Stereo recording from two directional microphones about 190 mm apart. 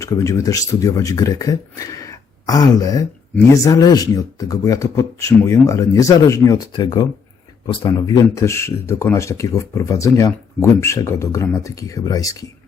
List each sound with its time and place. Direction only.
0.0 s speech: 15° left (ahead or behind)